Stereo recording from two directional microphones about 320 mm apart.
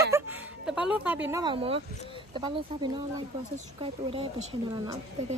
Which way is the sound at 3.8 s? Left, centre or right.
Centre.